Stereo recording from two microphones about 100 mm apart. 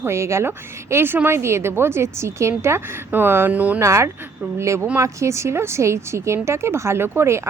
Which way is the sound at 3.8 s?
30° right (ahead or behind).